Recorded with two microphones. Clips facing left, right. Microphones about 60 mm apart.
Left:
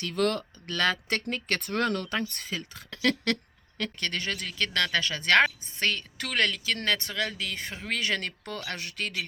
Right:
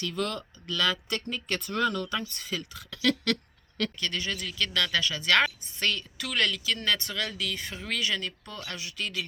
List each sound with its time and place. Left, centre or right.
0.0 s speech: left
2.5 s a woman's voice: left